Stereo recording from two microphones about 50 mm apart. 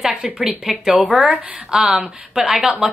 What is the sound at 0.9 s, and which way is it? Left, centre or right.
Speech, right.